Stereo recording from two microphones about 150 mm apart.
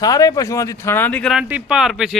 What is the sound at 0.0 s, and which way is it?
Speech, 25° left (ahead or behind).